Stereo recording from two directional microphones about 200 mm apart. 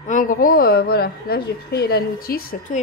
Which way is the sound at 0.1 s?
40° left (ahead or behind).